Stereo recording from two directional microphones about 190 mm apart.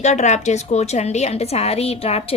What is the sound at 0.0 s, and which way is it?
A woman's voice, 40° left (ahead or behind).